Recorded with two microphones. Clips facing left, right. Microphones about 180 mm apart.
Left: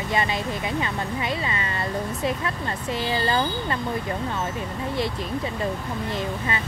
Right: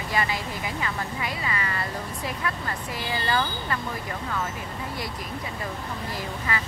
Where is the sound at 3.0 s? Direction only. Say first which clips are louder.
Left 2 dB; 25° left (ahead or behind).